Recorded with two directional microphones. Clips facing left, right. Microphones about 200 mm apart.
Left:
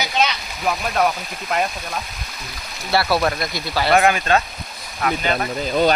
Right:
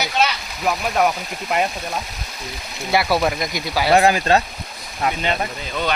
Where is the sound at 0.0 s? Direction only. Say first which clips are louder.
Even; 5° right (ahead or behind).